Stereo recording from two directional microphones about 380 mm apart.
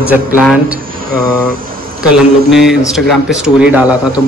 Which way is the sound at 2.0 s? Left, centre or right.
Centre.